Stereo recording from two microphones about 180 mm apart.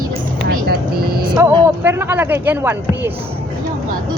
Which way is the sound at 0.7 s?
60° right (ahead or behind).